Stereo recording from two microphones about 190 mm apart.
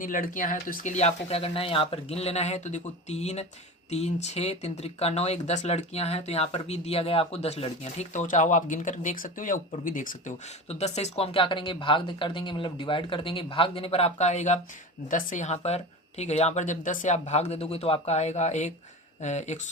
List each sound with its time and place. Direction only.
0.0 s speech: 45° left (ahead or behind)